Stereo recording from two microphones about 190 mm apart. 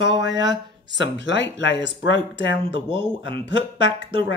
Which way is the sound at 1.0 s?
70° left (ahead or behind).